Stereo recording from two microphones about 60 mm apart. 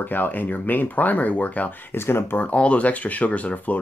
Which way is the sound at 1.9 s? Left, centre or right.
Left.